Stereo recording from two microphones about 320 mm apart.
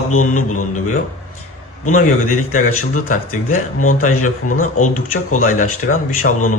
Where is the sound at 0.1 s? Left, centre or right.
Left.